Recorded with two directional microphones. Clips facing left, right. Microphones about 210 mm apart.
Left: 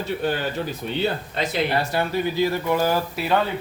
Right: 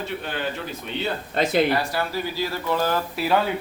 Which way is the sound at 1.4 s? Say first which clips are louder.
Right 5 dB; 50° right (ahead or behind).